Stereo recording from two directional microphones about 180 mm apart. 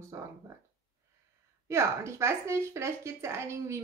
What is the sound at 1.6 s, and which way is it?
A woman's voice, 15° right (ahead or behind).